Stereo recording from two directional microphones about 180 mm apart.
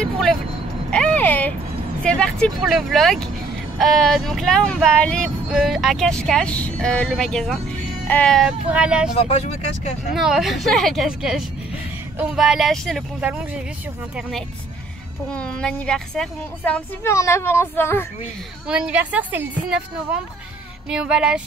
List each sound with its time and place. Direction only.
0.0 s vehicle: centre (ahead or behind)
2.0 s speech: 5° left (ahead or behind)
9.2 s speech: 35° left (ahead or behind)
10.1 s speech: centre (ahead or behind)
15.3 s a woman's voice: 5° left (ahead or behind)
18.7 s a woman's voice: 5° right (ahead or behind)